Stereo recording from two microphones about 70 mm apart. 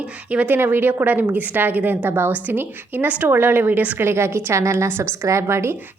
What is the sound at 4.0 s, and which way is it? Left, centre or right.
A woman's voice, right.